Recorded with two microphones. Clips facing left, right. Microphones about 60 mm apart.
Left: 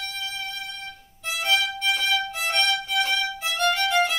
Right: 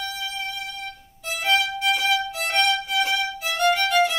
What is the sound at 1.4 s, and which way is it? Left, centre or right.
Violin, centre.